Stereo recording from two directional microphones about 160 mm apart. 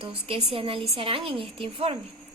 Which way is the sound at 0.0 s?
35° right (ahead or behind).